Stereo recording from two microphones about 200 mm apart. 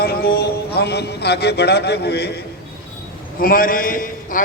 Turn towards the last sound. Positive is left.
turn(degrees=45)  # may be behind; listen again after turning